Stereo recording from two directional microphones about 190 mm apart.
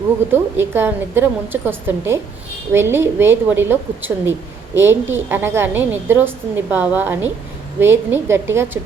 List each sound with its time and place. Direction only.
0.3 s a woman's voice: 10° right (ahead or behind)